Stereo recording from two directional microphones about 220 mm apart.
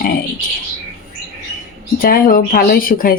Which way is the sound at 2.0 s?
40° left (ahead or behind).